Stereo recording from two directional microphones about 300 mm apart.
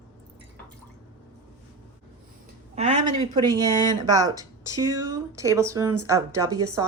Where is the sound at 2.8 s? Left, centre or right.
Right.